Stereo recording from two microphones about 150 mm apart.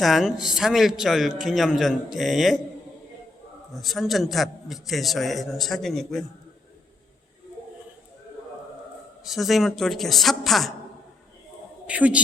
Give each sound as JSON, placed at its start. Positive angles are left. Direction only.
{"t": 0.0, "sound": "a man's voice", "side_deg": 0}
{"t": 3.8, "sound": "a man's voice", "side_deg": 0}
{"t": 9.2, "sound": "a man's voice", "side_deg": 0}
{"t": 11.9, "sound": "a man's voice", "side_deg": -10}